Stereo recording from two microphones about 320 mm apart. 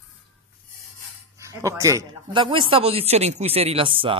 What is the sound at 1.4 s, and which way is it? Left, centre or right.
Speech, centre.